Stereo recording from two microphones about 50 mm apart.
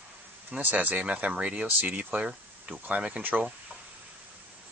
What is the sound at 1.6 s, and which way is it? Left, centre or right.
Speech, right.